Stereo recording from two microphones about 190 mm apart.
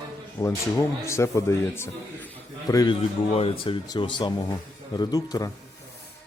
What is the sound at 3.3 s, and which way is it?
Speech, 30° left (ahead or behind).